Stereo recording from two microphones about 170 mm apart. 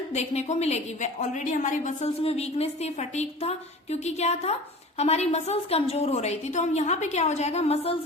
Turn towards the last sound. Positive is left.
turn(degrees=35)  # may be behind; listen again after turning